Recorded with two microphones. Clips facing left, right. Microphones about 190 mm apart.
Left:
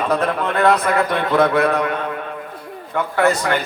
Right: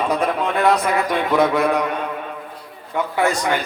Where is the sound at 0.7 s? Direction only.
55° left (ahead or behind).